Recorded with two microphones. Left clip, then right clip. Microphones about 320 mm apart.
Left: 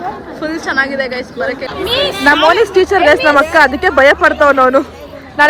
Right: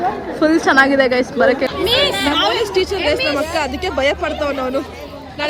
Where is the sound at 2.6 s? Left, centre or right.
Centre.